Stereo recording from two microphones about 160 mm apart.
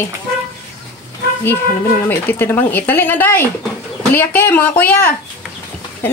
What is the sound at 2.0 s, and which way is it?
Speech, 15° left (ahead or behind).